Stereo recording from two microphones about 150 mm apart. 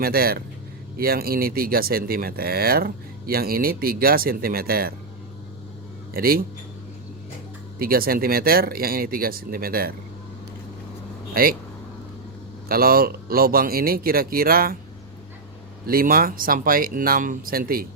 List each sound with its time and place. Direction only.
0.0 s speech: 85° right
6.1 s speech: 80° right
7.8 s speech: 75° right (ahead or behind)
11.3 s speech: 80° right
12.6 s speech: 80° right
15.9 s speech: 75° right (ahead or behind)